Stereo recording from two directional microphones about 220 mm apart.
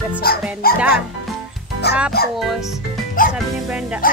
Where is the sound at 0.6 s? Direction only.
45° left (ahead or behind).